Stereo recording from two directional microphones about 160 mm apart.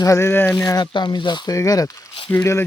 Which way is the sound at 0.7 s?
25° left (ahead or behind).